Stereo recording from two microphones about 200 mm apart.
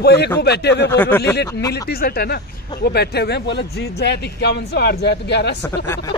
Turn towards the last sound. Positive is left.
turn(degrees=10)  # may be behind; listen again after turning